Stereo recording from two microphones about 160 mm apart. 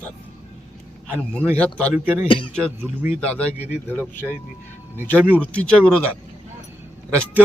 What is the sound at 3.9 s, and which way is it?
Speech, 10° left (ahead or behind).